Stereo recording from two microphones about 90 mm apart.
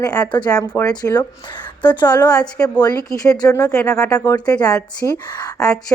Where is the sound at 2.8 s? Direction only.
45° left (ahead or behind).